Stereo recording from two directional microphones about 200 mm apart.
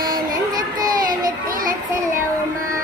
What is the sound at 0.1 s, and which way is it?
Child singing, 20° right (ahead or behind).